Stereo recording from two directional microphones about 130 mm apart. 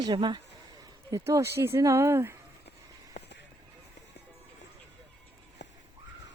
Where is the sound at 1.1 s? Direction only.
25° right (ahead or behind).